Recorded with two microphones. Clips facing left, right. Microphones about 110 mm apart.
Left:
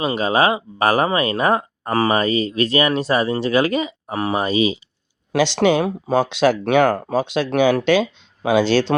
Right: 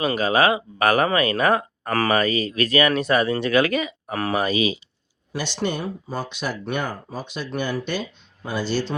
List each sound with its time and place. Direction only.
0.0 s speech: 30° left (ahead or behind)
5.3 s speech: 80° left